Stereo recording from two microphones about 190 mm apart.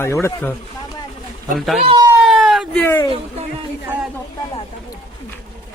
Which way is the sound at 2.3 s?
Centre (ahead or behind).